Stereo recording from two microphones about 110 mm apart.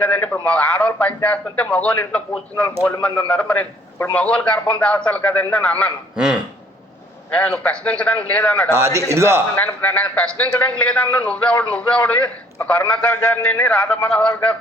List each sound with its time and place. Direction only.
0.0 s a man's voice: 15° left (ahead or behind)
6.1 s speech: 5° right (ahead or behind)
7.3 s a man's voice: 10° left (ahead or behind)
8.7 s a man's voice: 25° right (ahead or behind)
9.6 s a man's voice: 15° left (ahead or behind)